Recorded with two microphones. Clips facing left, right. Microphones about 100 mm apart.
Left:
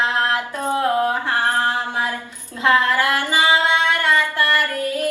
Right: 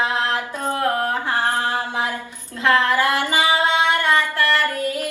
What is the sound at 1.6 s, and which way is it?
A capella, 20° left (ahead or behind).